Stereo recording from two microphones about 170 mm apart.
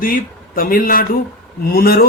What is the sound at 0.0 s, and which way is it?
A man's voice, 55° left (ahead or behind).